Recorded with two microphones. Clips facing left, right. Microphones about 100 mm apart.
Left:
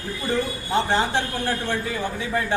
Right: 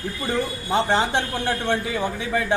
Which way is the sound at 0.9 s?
20° right (ahead or behind).